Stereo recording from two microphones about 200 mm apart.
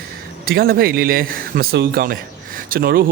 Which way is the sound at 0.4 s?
50° right (ahead or behind).